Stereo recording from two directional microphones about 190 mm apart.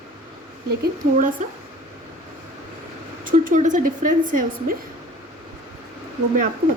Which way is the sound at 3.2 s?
45° right (ahead or behind).